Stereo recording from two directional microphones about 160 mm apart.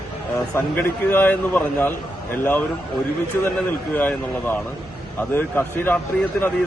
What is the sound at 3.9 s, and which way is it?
A man's voice, 10° left (ahead or behind).